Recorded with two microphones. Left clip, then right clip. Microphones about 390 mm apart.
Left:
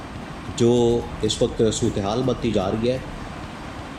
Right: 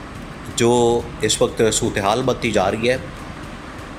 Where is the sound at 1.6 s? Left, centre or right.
Centre.